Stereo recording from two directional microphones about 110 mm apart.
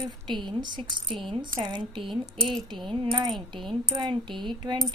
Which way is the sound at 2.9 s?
50° right (ahead or behind).